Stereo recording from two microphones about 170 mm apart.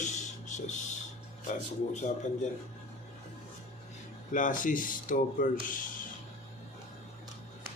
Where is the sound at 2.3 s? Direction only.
45° left (ahead or behind).